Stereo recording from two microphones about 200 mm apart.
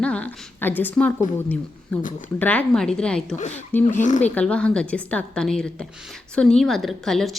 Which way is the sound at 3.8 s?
40° left (ahead or behind).